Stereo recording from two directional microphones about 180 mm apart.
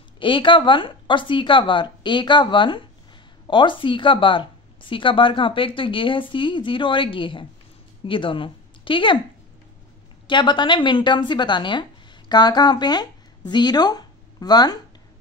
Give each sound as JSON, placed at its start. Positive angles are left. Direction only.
{"t": 0.2, "sound": "speech", "side_deg": 25}
{"t": 10.2, "sound": "a woman's voice", "side_deg": 25}